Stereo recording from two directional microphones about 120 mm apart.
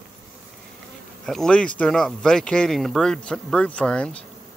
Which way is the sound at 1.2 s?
5° left (ahead or behind).